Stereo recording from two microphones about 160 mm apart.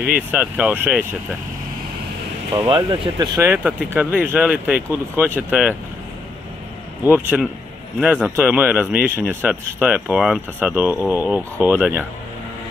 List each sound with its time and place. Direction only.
0.3 s speech: 10° right (ahead or behind)
2.7 s speech: 25° right (ahead or behind)
3.4 s speech: 10° right (ahead or behind)
7.1 s speech: 10° right (ahead or behind)